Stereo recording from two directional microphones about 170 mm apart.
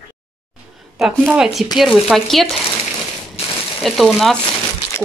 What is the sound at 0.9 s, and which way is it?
Speech, 5° right (ahead or behind).